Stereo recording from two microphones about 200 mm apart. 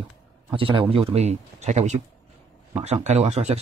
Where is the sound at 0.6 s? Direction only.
25° right (ahead or behind).